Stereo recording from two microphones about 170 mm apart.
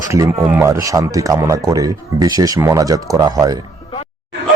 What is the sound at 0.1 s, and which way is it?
A man's voice, 20° right (ahead or behind).